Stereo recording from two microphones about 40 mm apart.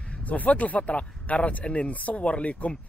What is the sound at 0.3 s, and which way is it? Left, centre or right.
Speech, left.